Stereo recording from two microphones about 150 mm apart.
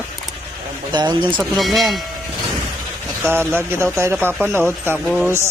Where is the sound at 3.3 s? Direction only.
15° right (ahead or behind).